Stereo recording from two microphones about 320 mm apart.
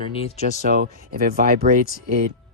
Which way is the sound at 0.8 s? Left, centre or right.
Right.